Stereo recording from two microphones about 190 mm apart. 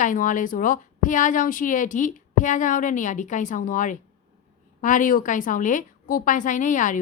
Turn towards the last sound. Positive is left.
turn(degrees=45)  # may be behind; listen again after turning